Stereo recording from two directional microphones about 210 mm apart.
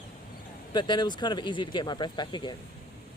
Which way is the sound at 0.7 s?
20° left (ahead or behind).